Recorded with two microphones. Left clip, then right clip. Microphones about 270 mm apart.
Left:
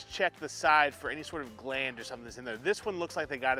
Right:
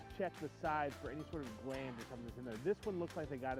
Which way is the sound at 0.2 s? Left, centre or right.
Centre.